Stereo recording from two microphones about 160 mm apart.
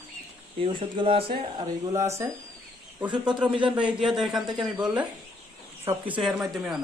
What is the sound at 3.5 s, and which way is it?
Speech, 35° right (ahead or behind).